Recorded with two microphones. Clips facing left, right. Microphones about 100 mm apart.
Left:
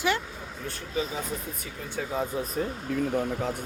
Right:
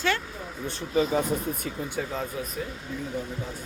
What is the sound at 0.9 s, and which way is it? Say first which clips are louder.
Speech: right 7 dB; 40° right (ahead or behind).